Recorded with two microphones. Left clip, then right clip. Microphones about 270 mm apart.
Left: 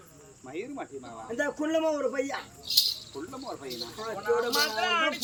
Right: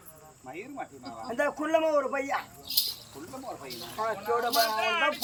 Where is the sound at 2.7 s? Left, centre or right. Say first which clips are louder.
Left 5 dB; centre.